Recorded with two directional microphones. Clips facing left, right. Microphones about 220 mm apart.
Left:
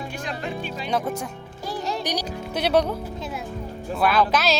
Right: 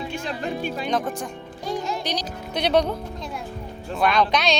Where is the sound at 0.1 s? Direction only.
25° right (ahead or behind).